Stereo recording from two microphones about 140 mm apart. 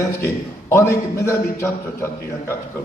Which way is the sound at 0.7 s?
20° left (ahead or behind).